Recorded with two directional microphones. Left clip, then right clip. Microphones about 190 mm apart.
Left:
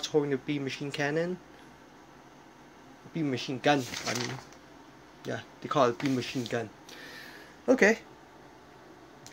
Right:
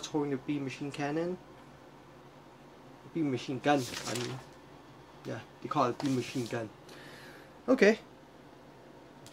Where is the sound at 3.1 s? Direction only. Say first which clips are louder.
Left 1 dB; 20° left (ahead or behind).